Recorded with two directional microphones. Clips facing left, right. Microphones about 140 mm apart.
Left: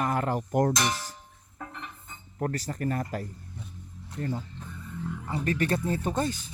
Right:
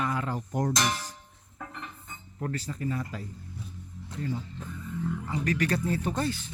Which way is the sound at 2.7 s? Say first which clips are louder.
Left 3 dB; 60° left (ahead or behind).